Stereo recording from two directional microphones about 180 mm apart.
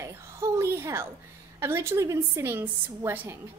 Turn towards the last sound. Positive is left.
turn(degrees=-10)  # may be behind; listen again after turning